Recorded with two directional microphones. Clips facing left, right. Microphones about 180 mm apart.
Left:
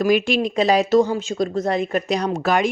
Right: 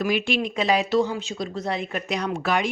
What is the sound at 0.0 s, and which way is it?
Speech, 40° left (ahead or behind).